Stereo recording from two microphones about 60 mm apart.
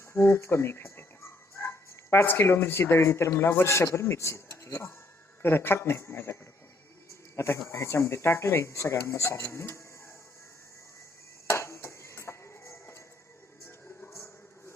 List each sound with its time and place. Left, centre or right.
0.1 s speech: left
5.4 s speech: left
7.1 s a sound: left
7.7 s speech: left
11.4 s music: left